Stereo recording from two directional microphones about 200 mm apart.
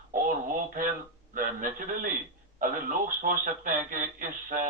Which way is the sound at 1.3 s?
40° right (ahead or behind).